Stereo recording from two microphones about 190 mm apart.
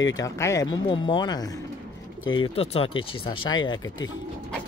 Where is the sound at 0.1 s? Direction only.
15° left (ahead or behind).